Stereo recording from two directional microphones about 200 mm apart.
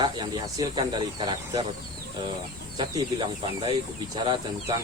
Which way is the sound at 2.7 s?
25° right (ahead or behind).